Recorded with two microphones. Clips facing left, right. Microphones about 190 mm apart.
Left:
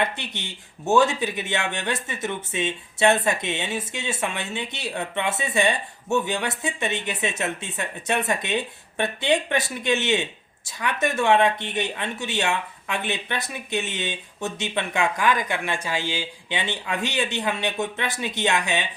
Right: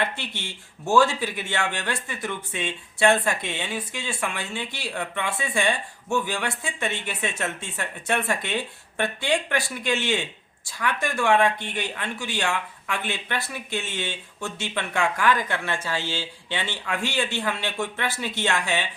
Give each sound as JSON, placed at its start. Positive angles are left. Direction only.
{"t": 0.0, "sound": "speech", "side_deg": 20}